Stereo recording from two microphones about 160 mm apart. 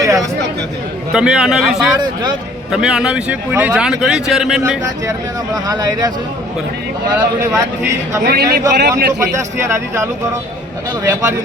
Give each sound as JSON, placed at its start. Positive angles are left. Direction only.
{"t": 0.0, "sound": "chatter", "side_deg": -20}
{"t": 1.1, "sound": "speech", "side_deg": -5}
{"t": 5.6, "sound": "speech", "side_deg": -25}
{"t": 8.3, "sound": "a man's voice", "side_deg": -80}
{"t": 9.3, "sound": "speech", "side_deg": -15}